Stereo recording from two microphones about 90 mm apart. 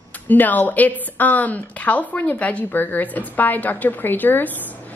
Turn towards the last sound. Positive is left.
turn(degrees=20)  # may be behind; listen again after turning